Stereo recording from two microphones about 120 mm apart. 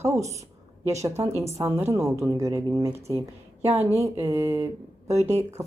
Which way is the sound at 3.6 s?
60° right (ahead or behind).